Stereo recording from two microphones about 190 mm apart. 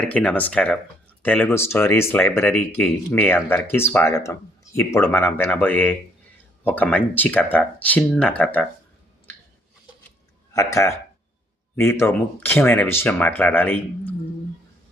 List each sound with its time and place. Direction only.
0.0 s speech: 5° left (ahead or behind)
10.5 s speech: 15° left (ahead or behind)